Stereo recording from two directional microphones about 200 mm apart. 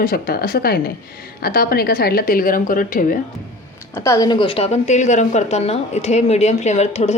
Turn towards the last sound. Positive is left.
turn(degrees=35)  # may be behind; listen again after turning